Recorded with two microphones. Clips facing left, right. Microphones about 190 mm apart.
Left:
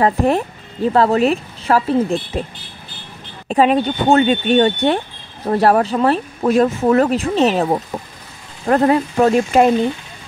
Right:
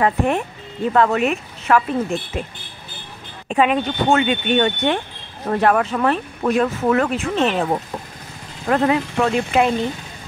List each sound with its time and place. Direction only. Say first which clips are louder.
0.0 s speech: left 3 dB; 35° left (ahead or behind)
3.4 s speech: left 4 dB; 35° left (ahead or behind)
8.6 s speech: left 4 dB; 40° left (ahead or behind)